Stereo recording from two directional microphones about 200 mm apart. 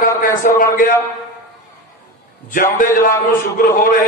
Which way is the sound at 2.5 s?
45° left (ahead or behind).